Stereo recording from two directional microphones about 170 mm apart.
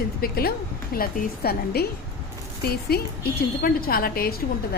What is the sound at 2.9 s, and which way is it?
A woman's voice, 65° left (ahead or behind).